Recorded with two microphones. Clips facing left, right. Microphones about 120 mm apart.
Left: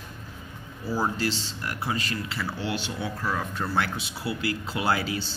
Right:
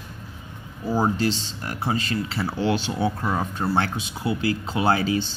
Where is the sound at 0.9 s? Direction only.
20° right (ahead or behind).